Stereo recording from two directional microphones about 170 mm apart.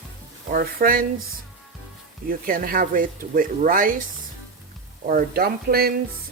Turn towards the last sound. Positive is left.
turn(degrees=-65)  # may be behind; listen again after turning